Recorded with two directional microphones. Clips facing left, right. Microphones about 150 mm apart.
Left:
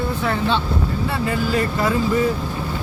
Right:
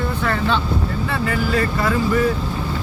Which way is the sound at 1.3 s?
15° left (ahead or behind).